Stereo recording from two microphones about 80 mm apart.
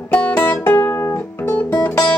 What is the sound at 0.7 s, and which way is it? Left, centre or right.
Music, left.